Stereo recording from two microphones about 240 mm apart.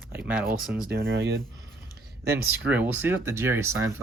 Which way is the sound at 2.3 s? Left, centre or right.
Centre.